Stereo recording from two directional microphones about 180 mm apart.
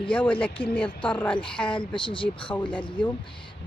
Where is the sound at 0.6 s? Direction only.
30° left (ahead or behind).